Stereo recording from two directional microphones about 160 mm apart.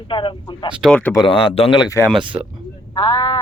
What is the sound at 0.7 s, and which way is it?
Speech, 5° right (ahead or behind).